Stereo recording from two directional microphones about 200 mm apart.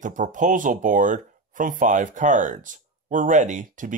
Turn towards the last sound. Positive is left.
turn(degrees=-40)  # may be behind; listen again after turning